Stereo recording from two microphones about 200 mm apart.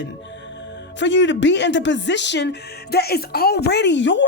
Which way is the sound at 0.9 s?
65° left (ahead or behind).